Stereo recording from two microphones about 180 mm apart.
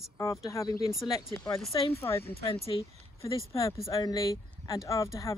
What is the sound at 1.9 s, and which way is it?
Speech, 15° left (ahead or behind).